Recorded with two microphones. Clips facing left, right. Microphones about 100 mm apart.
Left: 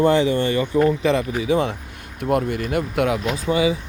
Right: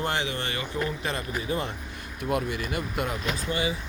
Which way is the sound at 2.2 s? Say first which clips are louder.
Left 7 dB; 55° left (ahead or behind).